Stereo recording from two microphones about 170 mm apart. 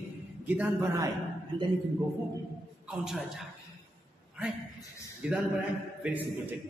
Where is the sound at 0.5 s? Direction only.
15° right (ahead or behind).